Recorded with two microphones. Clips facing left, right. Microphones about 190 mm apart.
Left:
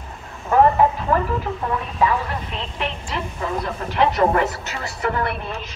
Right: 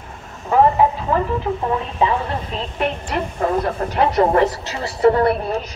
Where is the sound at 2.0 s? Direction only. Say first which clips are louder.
Left 1 dB; 25° right (ahead or behind).